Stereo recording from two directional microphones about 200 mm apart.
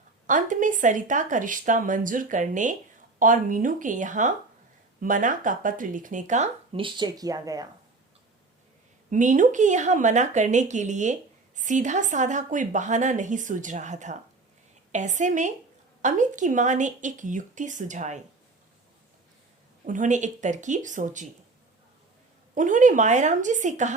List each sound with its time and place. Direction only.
0.3 s speech: 40° right (ahead or behind); by 7.7 s 20° right (ahead or behind)
9.0 s speech: 40° right (ahead or behind)
19.8 s speech: 40° right (ahead or behind)
22.5 s speech: 40° right (ahead or behind)